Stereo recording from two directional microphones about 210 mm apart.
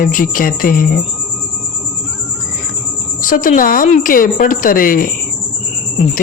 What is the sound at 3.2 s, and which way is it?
A woman's voice, 40° left (ahead or behind).